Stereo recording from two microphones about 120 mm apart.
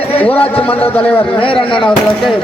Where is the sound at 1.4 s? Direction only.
45° left (ahead or behind).